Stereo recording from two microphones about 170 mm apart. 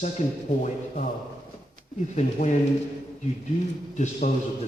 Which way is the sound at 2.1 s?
45° left (ahead or behind).